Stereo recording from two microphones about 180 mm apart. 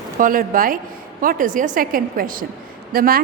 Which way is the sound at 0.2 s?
50° right (ahead or behind).